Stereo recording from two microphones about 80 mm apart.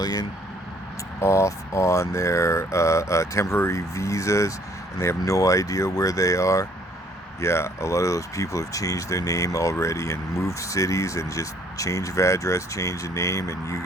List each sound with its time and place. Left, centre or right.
0.0 s speech: left
1.2 s speech: left